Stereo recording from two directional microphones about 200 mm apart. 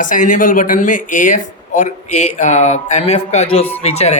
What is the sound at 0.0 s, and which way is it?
Speech, 40° left (ahead or behind).